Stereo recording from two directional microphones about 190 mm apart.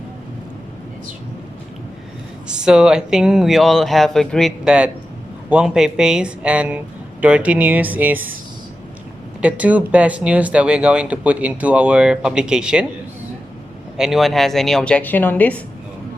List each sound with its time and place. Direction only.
2.5 s speech: 5° right (ahead or behind)
9.4 s speech: 5° right (ahead or behind)
13.9 s speech: centre (ahead or behind)